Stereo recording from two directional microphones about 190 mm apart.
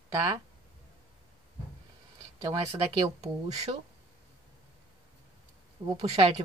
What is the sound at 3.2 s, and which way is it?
Speech, 35° right (ahead or behind).